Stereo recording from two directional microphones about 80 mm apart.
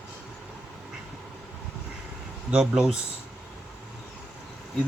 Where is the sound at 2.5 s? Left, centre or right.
Centre.